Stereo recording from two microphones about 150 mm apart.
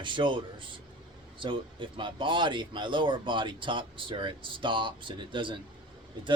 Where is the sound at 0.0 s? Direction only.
35° right (ahead or behind).